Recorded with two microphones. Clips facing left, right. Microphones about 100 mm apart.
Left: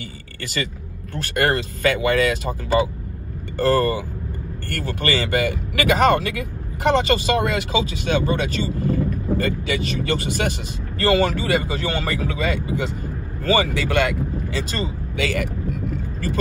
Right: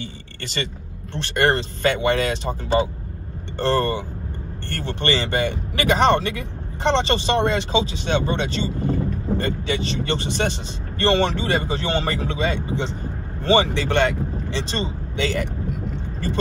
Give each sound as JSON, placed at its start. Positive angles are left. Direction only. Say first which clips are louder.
{"t": 1.1, "sound": "speech", "louder": "right 1 dB", "side_deg": -30}